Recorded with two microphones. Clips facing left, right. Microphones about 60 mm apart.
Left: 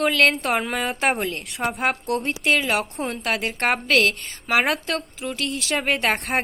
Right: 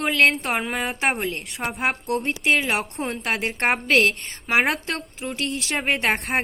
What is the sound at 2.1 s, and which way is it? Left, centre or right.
A woman's voice, centre.